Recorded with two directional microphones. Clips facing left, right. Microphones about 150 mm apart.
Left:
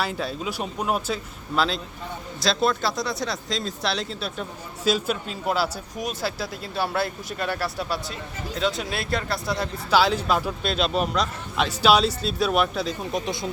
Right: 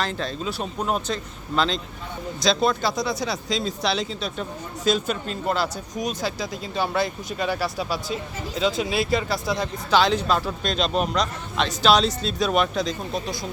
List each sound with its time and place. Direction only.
0.0 s speech: 10° left (ahead or behind)
13.1 s speech: 20° left (ahead or behind)